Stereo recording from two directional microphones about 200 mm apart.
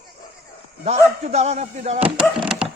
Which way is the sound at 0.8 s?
35° right (ahead or behind).